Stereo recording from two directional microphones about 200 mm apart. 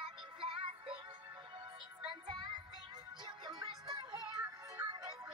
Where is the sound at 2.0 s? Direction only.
20° right (ahead or behind).